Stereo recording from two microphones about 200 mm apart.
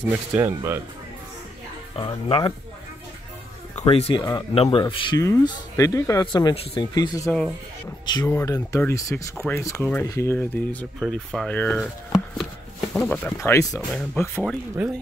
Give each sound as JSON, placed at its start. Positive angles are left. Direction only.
{"t": 0.1, "sound": "speech", "side_deg": -15}
{"t": 2.0, "sound": "speech", "side_deg": 25}
{"t": 3.7, "sound": "speech", "side_deg": 30}
{"t": 8.3, "sound": "speech", "side_deg": 10}
{"t": 12.9, "sound": "speech", "side_deg": 5}